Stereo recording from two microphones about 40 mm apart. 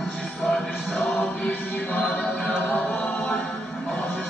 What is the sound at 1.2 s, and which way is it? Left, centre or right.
Music, left.